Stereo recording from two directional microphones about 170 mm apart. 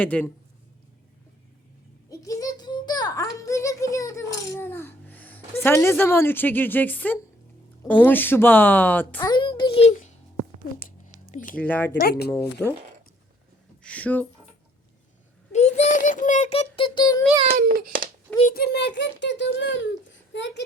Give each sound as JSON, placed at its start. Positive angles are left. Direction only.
{"t": 0.0, "sound": "speech", "side_deg": 10}
{"t": 2.0, "sound": "a sound", "side_deg": 20}
{"t": 7.9, "sound": "speech", "side_deg": 10}
{"t": 9.2, "sound": "a child's voice", "side_deg": 25}
{"t": 11.0, "sound": "a sound", "side_deg": 50}
{"t": 11.5, "sound": "speech", "side_deg": 10}
{"t": 13.8, "sound": "speech", "side_deg": 10}
{"t": 15.5, "sound": "a child's voice", "side_deg": 40}
{"t": 17.5, "sound": "a child's voice", "side_deg": -65}
{"t": 18.4, "sound": "a child's voice", "side_deg": 65}